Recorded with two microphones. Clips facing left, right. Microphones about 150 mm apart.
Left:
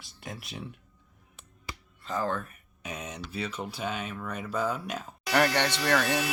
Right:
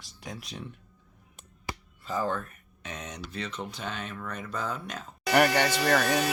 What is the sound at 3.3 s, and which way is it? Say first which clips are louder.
Speech: left 2 dB; 10° left (ahead or behind).